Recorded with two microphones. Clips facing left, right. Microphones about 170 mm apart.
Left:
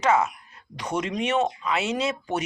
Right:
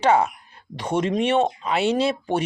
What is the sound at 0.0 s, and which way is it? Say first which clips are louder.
Speech: right 3 dB; 30° right (ahead or behind).